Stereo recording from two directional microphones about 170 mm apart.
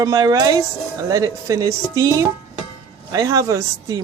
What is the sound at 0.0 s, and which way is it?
A woman's voice, 20° right (ahead or behind).